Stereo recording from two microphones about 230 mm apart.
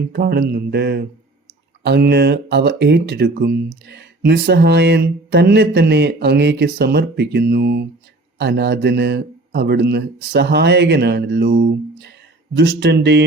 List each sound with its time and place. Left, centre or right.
0.1 s speech: right